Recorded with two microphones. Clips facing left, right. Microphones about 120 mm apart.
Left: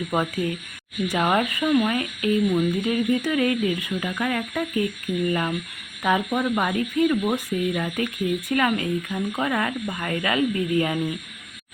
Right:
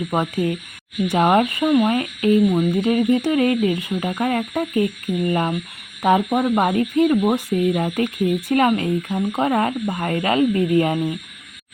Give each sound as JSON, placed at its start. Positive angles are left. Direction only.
{"t": 0.1, "sound": "speech", "side_deg": -25}